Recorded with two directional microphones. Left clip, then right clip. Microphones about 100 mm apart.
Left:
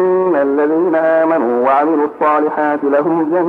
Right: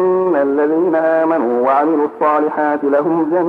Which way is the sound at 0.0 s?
25° left (ahead or behind).